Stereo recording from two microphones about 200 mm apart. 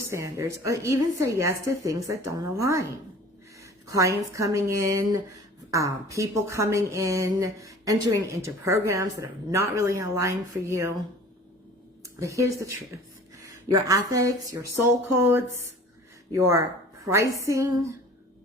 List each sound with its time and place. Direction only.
0.0 s a woman's voice: 15° right (ahead or behind)
3.6 s a sound: 15° right (ahead or behind)
4.4 s a woman's voice: 15° right (ahead or behind)
12.0 s a woman's voice: 15° right (ahead or behind)